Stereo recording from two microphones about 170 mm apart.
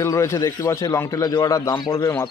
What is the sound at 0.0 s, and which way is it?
A man's voice, 15° left (ahead or behind).